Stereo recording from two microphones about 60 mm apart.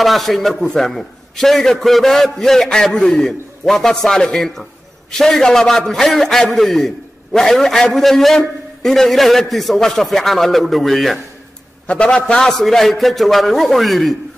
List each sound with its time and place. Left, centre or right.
0.0 s a man's voice: centre
11.9 s a man's voice: centre
12.4 s a man's voice: centre